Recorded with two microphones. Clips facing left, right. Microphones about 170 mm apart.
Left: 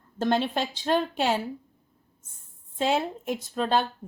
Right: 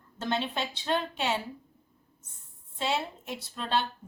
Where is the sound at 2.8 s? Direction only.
45° left (ahead or behind).